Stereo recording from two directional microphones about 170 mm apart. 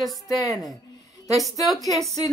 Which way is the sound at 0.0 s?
Centre (ahead or behind).